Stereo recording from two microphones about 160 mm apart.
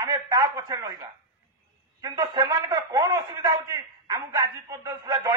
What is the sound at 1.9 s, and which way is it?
A man's voice, 20° right (ahead or behind).